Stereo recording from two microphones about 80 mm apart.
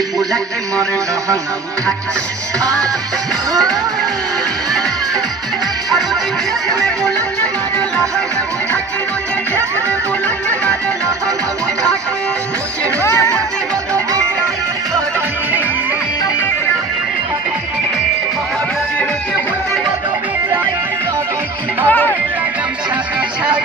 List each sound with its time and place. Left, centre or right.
21.8 s music: left